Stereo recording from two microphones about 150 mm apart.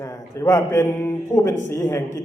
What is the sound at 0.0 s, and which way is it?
A man's voice, 20° left (ahead or behind).